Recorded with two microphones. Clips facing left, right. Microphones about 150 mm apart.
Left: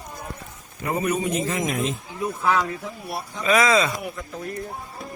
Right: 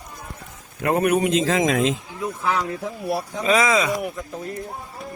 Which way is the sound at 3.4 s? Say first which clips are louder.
Left 1 dB; 25° right (ahead or behind).